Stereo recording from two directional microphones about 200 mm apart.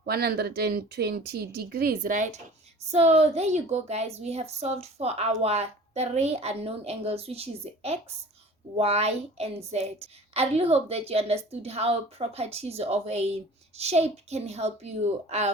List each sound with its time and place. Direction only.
0.0 s a woman's voice: 50° right (ahead or behind); by 15.5 s 35° right (ahead or behind)